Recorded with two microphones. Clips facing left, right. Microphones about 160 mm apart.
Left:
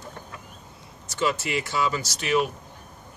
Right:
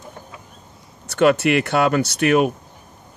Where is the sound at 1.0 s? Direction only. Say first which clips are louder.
Right 11 dB; 65° right (ahead or behind).